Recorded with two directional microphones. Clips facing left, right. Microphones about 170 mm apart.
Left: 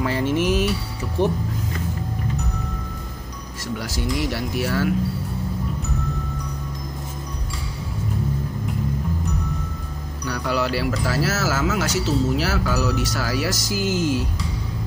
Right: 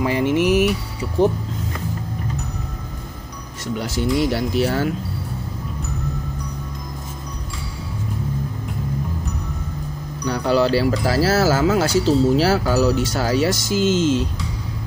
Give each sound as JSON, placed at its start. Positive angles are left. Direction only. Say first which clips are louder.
{"t": 0.0, "sound": "music", "louder": "right 3 dB", "side_deg": -15}
{"t": 3.7, "sound": "speech", "louder": "right 5 dB", "side_deg": -25}
{"t": 10.2, "sound": "speech", "louder": "right 6 dB", "side_deg": -25}